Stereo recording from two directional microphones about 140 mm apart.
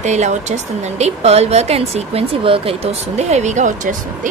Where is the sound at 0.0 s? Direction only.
55° right (ahead or behind).